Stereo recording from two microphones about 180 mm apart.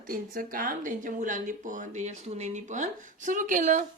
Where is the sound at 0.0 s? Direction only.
50° right (ahead or behind).